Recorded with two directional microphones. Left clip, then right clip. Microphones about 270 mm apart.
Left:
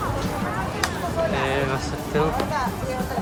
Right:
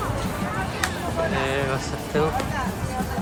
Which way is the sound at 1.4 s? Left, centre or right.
Centre.